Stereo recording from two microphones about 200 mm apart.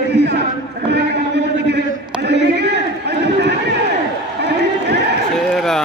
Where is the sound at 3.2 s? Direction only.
60° right (ahead or behind).